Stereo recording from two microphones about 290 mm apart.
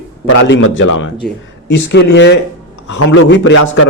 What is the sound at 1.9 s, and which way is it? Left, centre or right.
A man's voice, left.